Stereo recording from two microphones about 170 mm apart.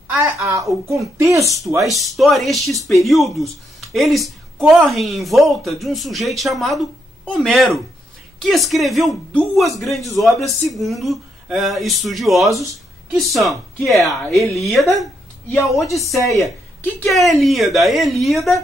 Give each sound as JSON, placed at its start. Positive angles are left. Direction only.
{"t": 0.1, "sound": "a woman's voice", "side_deg": -15}
{"t": 2.1, "sound": "a man's voice", "side_deg": 0}